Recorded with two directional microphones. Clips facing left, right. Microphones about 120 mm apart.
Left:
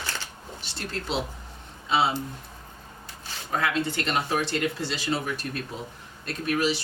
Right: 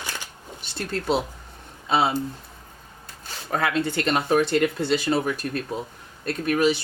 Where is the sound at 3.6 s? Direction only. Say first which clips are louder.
Right 3 dB; 50° right (ahead or behind).